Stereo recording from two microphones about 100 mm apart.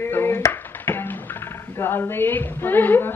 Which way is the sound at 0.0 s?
20° left (ahead or behind).